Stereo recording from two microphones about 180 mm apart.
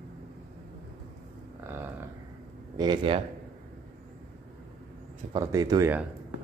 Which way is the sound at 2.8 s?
25° right (ahead or behind).